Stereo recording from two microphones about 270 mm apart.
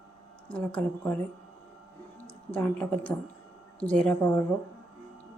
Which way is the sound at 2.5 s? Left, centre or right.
Centre.